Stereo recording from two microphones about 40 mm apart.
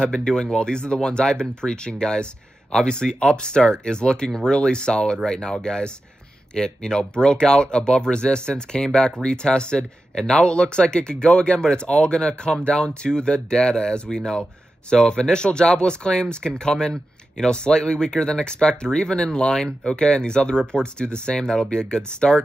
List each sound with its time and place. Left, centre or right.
0.0 s speech: centre